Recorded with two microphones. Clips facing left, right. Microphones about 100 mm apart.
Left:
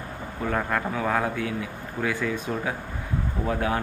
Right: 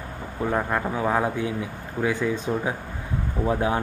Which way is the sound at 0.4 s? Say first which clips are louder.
Right 2 dB; 15° right (ahead or behind).